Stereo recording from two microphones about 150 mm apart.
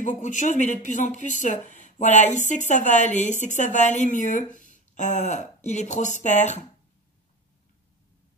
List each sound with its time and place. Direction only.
0.0 s speech: 55° left (ahead or behind)